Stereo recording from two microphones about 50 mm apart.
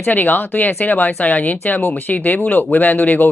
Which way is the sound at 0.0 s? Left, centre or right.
Left.